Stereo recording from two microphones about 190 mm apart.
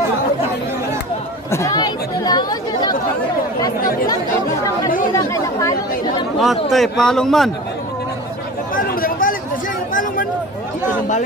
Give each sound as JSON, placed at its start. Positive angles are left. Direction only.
{"t": 1.5, "sound": "speech", "side_deg": 20}
{"t": 3.8, "sound": "speech", "side_deg": 50}
{"t": 5.1, "sound": "speech", "side_deg": 15}
{"t": 6.4, "sound": "a man's voice", "side_deg": 0}
{"t": 8.7, "sound": "chatter", "side_deg": 50}